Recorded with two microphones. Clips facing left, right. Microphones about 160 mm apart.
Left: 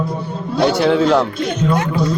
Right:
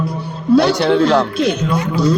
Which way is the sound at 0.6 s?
Centre (ahead or behind).